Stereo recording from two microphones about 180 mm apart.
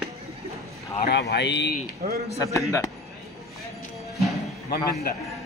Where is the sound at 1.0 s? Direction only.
70° left (ahead or behind).